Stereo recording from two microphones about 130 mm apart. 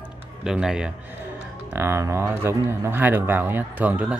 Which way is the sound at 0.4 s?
5° right (ahead or behind).